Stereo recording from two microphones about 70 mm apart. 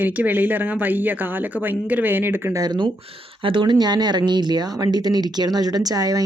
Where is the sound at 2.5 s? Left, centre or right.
Right.